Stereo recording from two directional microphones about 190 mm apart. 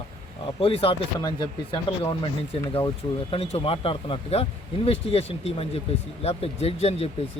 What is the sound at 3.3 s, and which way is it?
A man's voice, 30° left (ahead or behind).